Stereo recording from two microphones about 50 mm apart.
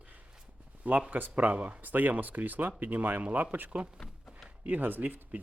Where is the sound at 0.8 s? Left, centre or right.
Right.